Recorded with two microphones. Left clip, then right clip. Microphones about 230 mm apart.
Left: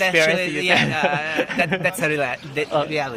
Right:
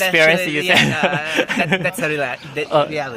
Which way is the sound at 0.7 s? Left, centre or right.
Right.